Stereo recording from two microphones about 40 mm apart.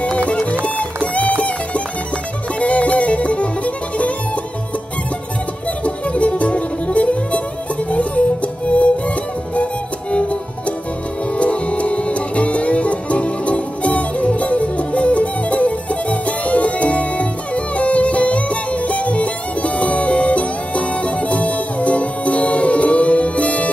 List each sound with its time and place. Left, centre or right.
0.3 s music: left
2.6 s music: left
5.9 s music: left
11.3 s music: left